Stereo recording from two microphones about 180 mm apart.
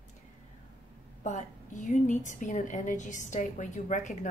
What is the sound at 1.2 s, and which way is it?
Speech, 45° left (ahead or behind).